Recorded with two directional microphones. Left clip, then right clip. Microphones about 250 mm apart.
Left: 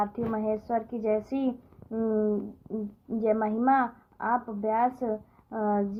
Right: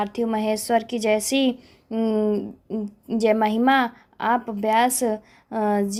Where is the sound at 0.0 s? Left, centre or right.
Right.